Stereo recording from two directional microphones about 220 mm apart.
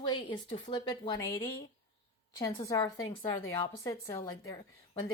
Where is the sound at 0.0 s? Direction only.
20° left (ahead or behind).